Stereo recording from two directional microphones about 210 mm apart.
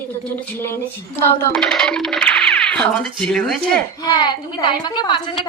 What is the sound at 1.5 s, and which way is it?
Speech, 5° left (ahead or behind).